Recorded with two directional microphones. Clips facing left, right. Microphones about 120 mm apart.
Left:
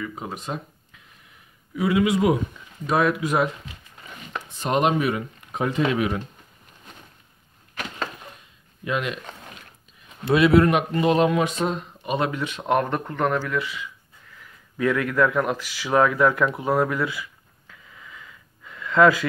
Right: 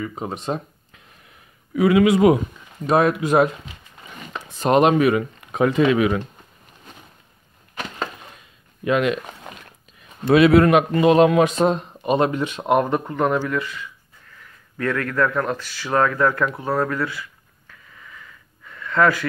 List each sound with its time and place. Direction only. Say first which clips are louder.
0.0 s speech: right 4 dB; 25° right (ahead or behind)
1.8 s speech: right 6 dB; 90° right
2.9 s speech: right 4 dB; 35° right (ahead or behind)
4.6 s speech: right 6 dB; 90° right
8.8 s speech: right 7 dB; 80° right
10.3 s speech: right 4 dB; 90° right
11.5 s speech: right 6 dB; 45° right (ahead or behind)
12.5 s speech: right 3 dB; 15° right (ahead or behind); by 16.4 s 10° left (ahead or behind)
16.5 s a sound: even; 15° left (ahead or behind)